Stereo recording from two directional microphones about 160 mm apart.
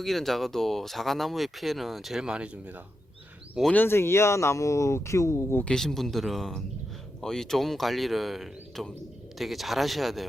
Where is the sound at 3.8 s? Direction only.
15° left (ahead or behind).